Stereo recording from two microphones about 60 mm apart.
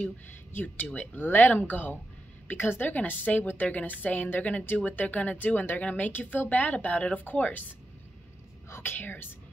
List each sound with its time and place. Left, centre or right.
0.5 s a woman's voice: left
2.9 s a woman's voice: left
8.6 s whispering: left
8.9 s speech: left